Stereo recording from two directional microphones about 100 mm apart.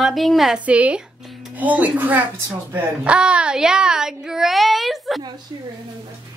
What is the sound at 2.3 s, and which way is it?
Speech, 30° right (ahead or behind).